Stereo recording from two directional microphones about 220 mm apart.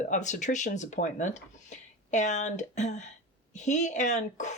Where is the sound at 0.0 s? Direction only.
35° left (ahead or behind).